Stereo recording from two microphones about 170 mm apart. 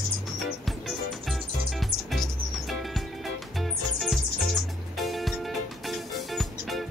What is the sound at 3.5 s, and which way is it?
Music, centre (ahead or behind).